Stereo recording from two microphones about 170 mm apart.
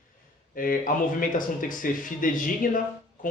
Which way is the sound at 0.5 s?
55° left (ahead or behind).